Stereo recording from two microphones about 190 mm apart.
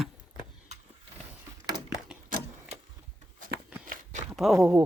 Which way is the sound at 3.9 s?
40° right (ahead or behind).